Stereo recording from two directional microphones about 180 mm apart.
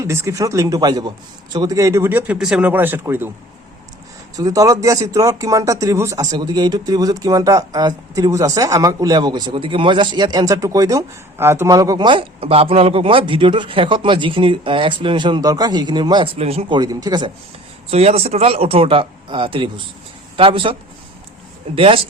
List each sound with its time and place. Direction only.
0.0 s speech: 15° right (ahead or behind)
4.4 s speech: 20° right (ahead or behind)
17.9 s a man's voice: 35° right (ahead or behind)
21.8 s speech: 30° right (ahead or behind)